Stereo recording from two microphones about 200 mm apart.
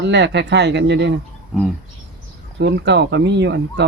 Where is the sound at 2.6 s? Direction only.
60° right (ahead or behind).